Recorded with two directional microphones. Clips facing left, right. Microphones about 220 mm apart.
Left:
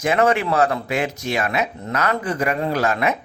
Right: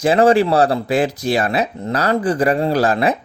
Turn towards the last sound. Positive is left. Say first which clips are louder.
# right 4 dB
turn(degrees=-35)  # may be behind; listen again after turning